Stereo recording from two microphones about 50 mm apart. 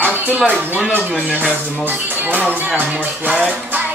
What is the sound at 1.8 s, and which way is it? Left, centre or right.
Speech, right.